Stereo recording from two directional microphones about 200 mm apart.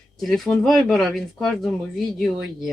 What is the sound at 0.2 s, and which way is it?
Speech, centre (ahead or behind).